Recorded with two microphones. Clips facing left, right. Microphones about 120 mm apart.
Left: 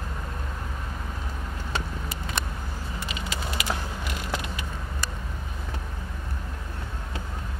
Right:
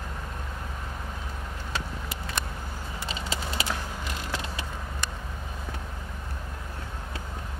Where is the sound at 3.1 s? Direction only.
30° right (ahead or behind).